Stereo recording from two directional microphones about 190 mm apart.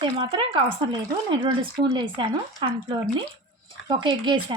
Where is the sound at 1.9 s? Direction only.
25° right (ahead or behind).